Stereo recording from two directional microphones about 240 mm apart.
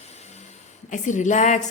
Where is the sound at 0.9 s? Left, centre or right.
Left.